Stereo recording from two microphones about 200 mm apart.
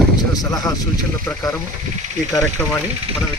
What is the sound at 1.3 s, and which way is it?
Speech, 5° left (ahead or behind).